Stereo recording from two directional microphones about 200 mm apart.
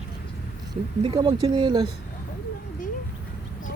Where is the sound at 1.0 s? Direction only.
25° right (ahead or behind).